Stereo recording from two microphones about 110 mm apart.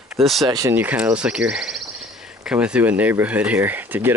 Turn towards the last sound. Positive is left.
turn(degrees=-15)  # may be behind; listen again after turning